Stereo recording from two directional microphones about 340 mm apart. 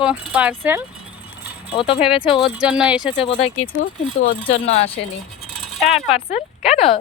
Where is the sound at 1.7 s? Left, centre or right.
Centre.